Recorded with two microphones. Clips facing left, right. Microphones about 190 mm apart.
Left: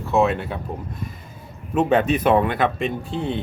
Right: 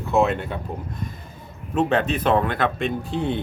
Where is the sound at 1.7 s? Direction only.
5° left (ahead or behind).